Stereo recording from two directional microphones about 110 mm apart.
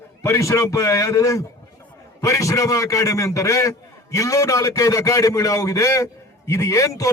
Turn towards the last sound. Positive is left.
turn(degrees=30)  # may be behind; listen again after turning